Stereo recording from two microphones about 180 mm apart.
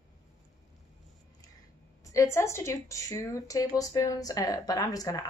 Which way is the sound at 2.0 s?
15° left (ahead or behind).